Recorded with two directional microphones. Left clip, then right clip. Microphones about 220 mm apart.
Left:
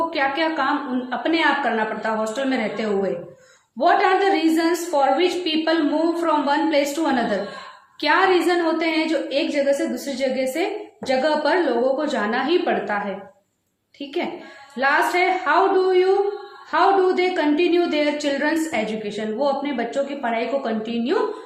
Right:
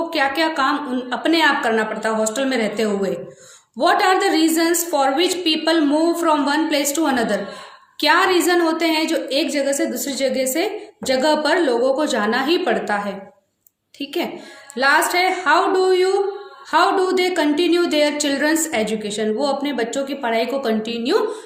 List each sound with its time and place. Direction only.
0.1 s a woman's voice: 50° right (ahead or behind)
14.0 s a woman's voice: 50° right (ahead or behind)